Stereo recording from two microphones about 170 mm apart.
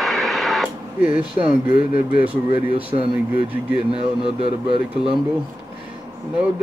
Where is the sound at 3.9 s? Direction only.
35° right (ahead or behind).